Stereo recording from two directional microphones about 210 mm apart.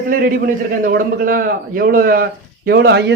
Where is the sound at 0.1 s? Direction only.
45° right (ahead or behind).